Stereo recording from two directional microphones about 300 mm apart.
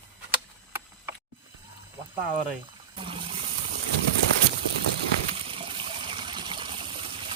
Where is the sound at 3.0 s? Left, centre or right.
Centre.